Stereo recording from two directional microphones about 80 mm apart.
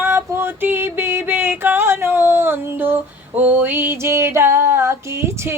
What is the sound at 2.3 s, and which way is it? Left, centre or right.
Female singing, right.